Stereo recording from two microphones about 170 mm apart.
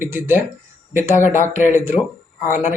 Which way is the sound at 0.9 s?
50° left (ahead or behind).